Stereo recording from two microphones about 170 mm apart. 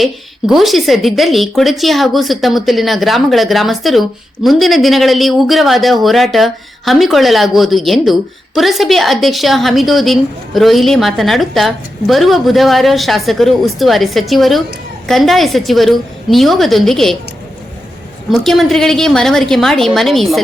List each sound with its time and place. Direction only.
0.0 s speech: centre (ahead or behind)
18.3 s speech: centre (ahead or behind)